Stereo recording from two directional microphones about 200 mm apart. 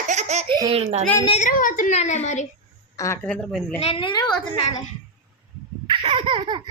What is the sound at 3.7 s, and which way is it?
Speech, 30° left (ahead or behind).